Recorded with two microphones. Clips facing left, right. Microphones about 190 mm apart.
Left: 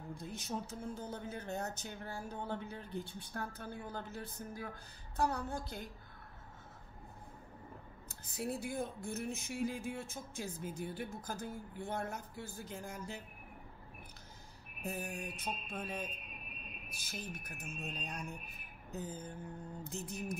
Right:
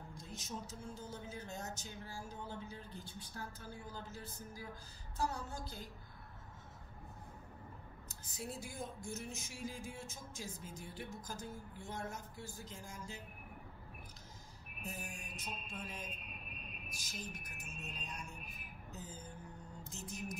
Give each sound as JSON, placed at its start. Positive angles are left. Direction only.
{"t": 0.1, "sound": "speech", "side_deg": 60}
{"t": 8.3, "sound": "speech", "side_deg": 60}
{"t": 14.8, "sound": "speech", "side_deg": 60}
{"t": 19.8, "sound": "mantra", "side_deg": 60}